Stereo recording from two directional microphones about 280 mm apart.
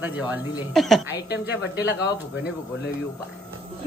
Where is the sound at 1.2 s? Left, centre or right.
Left.